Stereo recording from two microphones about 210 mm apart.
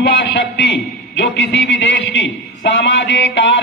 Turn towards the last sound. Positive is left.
turn(degrees=60)  # may be behind; listen again after turning